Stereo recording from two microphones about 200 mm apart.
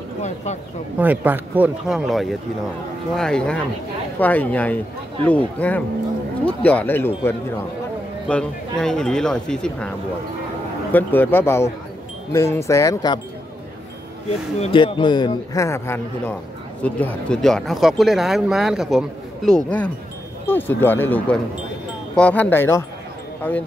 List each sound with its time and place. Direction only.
0.9 s speech: 10° right (ahead or behind); by 7.1 s 10° left (ahead or behind)
8.3 s speech: 5° left (ahead or behind)
14.6 s a man's voice: 25° left (ahead or behind); by 23.6 s 10° left (ahead or behind)